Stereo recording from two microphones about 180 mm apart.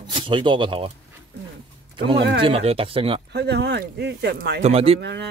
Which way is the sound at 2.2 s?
65° right (ahead or behind).